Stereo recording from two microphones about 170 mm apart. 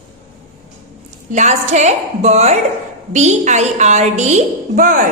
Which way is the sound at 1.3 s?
45° right (ahead or behind).